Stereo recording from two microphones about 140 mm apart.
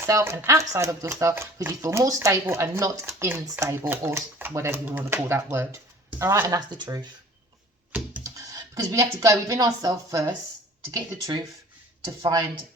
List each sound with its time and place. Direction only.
0.0 s speech: 20° right (ahead or behind)
8.2 s speech: 25° right (ahead or behind)
12.2 s speech: 25° right (ahead or behind)